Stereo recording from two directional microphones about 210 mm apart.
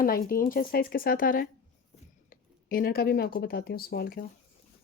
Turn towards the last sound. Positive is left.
turn(degrees=45)  # may be behind; listen again after turning